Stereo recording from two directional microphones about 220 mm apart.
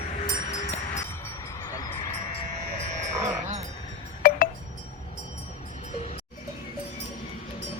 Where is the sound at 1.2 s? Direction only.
15° left (ahead or behind).